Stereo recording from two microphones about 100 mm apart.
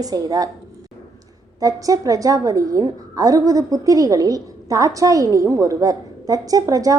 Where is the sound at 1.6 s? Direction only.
35° right (ahead or behind).